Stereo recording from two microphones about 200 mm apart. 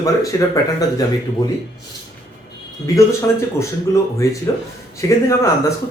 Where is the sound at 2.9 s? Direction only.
15° left (ahead or behind).